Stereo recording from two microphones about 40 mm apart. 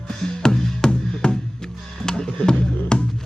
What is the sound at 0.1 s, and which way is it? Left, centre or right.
Music, centre.